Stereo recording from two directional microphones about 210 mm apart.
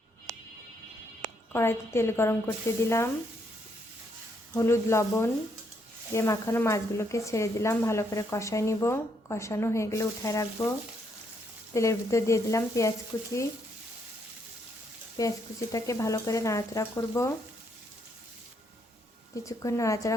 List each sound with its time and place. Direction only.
1.5 s speech: 10° left (ahead or behind)
4.5 s speech: 15° left (ahead or behind)
11.7 s speech: 15° left (ahead or behind)
15.2 s speech: 15° left (ahead or behind)
19.5 s speech: 15° left (ahead or behind)